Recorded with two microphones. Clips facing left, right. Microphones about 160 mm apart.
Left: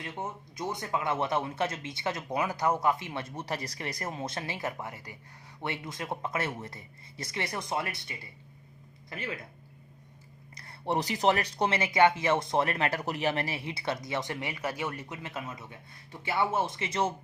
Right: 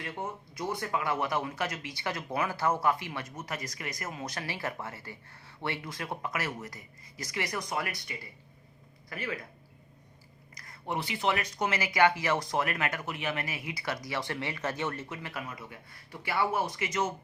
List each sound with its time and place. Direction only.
0.0 s speech: 20° left (ahead or behind)
10.5 s speech: 30° left (ahead or behind)